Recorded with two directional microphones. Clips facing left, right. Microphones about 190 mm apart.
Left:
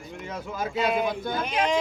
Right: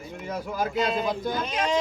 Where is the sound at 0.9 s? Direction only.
20° left (ahead or behind).